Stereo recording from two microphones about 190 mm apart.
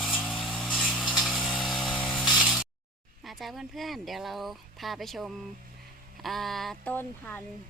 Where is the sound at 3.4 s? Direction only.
Centre (ahead or behind).